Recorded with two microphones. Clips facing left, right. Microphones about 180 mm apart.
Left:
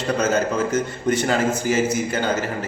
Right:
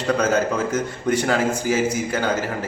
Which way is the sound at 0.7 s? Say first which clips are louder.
Left 1 dB; 10° right (ahead or behind).